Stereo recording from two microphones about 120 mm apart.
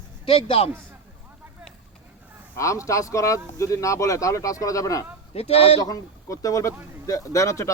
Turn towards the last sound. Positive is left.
turn(degrees=25)  # may be behind; listen again after turning